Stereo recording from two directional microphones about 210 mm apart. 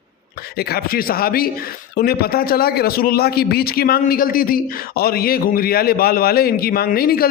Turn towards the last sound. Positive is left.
turn(degrees=45)  # may be behind; listen again after turning